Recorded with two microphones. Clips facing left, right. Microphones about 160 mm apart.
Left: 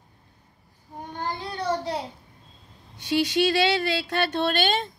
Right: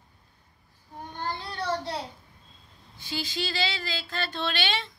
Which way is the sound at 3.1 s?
70° left (ahead or behind).